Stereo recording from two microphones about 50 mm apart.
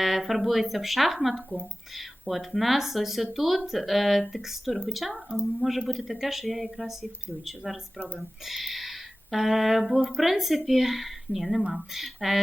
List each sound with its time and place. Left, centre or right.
0.0 s speech: centre
7.9 s speech: right
8.4 s speech: centre